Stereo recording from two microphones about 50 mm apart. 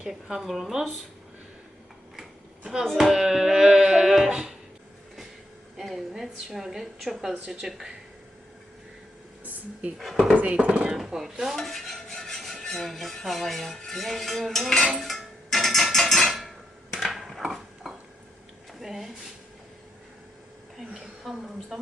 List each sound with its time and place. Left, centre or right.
0.0 s a woman's voice: centre
3.0 s music: centre
5.7 s a woman's voice: centre
10.0 s a woman's voice: centre
10.3 s speech: right
10.7 s a woman's voice: centre
11.5 s stir: centre
15.0 s music: centre
17.0 s a sound: centre
20.7 s a sound: centre